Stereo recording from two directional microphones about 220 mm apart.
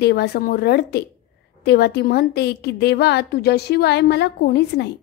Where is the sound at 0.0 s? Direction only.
50° left (ahead or behind).